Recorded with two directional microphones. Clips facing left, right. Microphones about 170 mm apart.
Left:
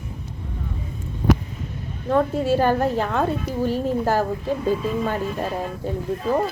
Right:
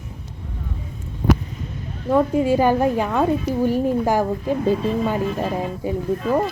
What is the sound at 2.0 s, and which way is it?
A woman's voice, 10° right (ahead or behind).